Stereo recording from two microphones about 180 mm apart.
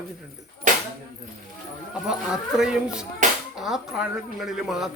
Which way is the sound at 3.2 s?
45° right (ahead or behind).